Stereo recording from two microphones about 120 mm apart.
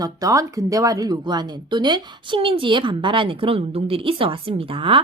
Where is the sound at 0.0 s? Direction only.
30° right (ahead or behind).